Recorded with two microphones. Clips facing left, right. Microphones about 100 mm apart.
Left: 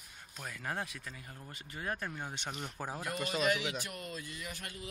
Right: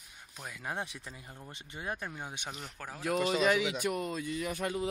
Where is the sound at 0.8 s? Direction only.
25° right (ahead or behind).